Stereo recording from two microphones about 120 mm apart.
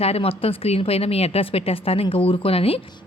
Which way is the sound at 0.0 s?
55° left (ahead or behind).